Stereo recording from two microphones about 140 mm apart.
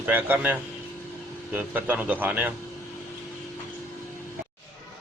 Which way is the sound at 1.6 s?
10° right (ahead or behind).